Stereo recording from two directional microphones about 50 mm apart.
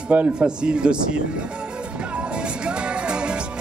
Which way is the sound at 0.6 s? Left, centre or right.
Centre.